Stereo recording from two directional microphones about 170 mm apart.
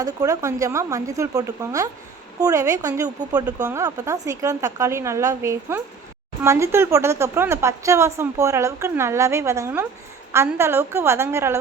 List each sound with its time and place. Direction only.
0.0 s a woman's voice: 20° right (ahead or behind)